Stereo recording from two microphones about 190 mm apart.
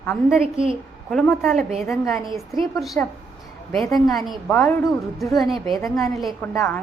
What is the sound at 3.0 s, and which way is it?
A woman's voice, 10° left (ahead or behind).